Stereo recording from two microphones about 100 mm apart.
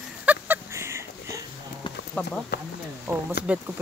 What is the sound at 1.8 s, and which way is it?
Clip-clop, 60° left (ahead or behind).